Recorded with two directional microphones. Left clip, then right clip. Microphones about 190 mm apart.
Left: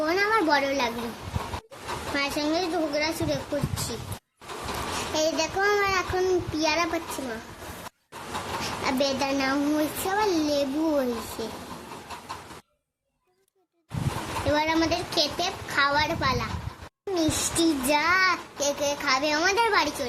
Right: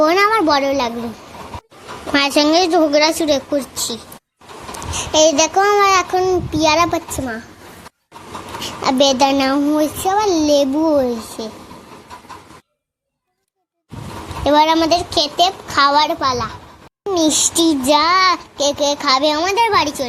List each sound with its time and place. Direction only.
0.0 s a sound: 35° right (ahead or behind)
2.1 s a child's voice: 45° right (ahead or behind)
5.1 s a child's voice: 40° right (ahead or behind)
8.8 s a child's voice: 35° right (ahead or behind)
14.4 s a child's voice: 35° right (ahead or behind)